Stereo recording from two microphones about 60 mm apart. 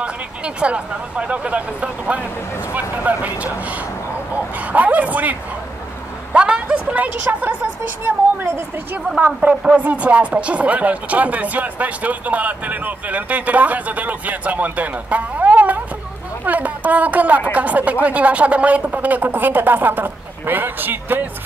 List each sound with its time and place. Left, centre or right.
0.0 s speech: centre
4.6 s a woman's voice: right